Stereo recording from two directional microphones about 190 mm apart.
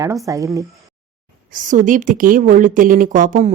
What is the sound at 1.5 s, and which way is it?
A woman's voice, 45° right (ahead or behind).